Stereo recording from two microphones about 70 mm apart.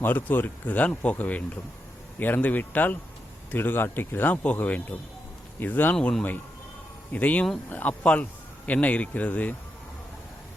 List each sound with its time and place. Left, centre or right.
0.0 s speech: left
6.0 s speech: centre
7.1 s speech: left